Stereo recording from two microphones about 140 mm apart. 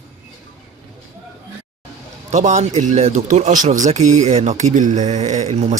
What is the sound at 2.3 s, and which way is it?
Speech, 55° right (ahead or behind).